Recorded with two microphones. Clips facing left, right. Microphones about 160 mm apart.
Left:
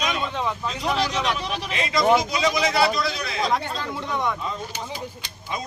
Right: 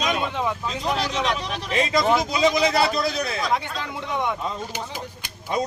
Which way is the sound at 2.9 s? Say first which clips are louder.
Right 2 dB; 45° right (ahead or behind).